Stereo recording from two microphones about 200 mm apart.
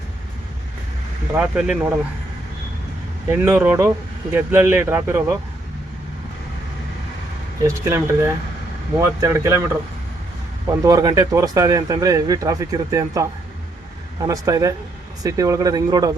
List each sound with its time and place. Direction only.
1.5 s speech: 5° right (ahead or behind)
3.2 s speech: 10° right (ahead or behind)
7.6 s speech: 15° right (ahead or behind)
10.8 s speech: 20° right (ahead or behind)